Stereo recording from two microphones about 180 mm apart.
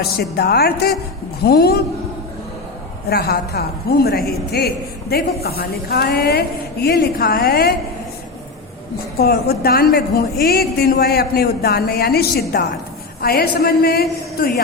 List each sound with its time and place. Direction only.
0.0 s a woman's voice: 60° left (ahead or behind)
3.1 s a woman's voice: 60° left (ahead or behind)
9.1 s a woman's voice: 60° left (ahead or behind)